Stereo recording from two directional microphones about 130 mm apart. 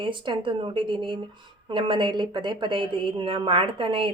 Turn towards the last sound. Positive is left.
turn(degrees=-40)  # may be behind; listen again after turning